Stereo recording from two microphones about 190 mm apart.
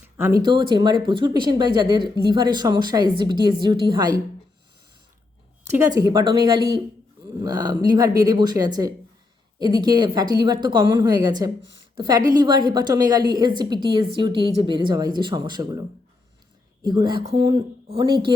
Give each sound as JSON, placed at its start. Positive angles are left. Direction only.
{"t": 0.0, "sound": "a sound", "side_deg": -10}
{"t": 0.5, "sound": "speech", "side_deg": -20}
{"t": 5.7, "sound": "speech", "side_deg": -15}
{"t": 16.8, "sound": "speech", "side_deg": -20}